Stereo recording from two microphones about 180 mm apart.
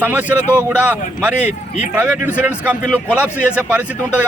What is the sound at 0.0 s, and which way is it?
Speech, 10° right (ahead or behind).